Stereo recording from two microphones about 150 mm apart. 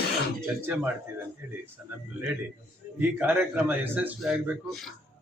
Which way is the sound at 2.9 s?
10° right (ahead or behind).